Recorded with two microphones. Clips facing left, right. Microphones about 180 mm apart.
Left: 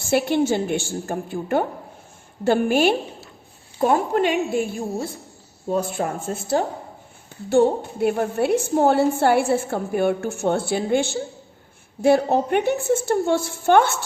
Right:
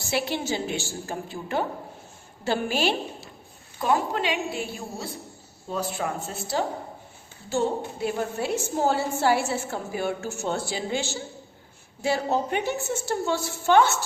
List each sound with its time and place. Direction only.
0.0 s a woman's voice: 50° left (ahead or behind)
7.5 s a woman's voice: 60° left (ahead or behind)